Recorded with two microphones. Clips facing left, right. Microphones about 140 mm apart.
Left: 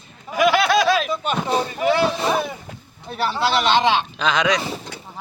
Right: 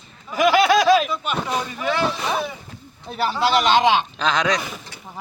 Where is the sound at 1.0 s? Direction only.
35° left (ahead or behind).